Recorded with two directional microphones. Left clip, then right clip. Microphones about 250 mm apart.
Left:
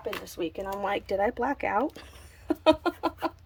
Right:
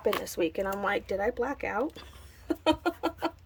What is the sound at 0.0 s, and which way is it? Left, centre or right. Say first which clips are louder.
Speech: right 5 dB; centre.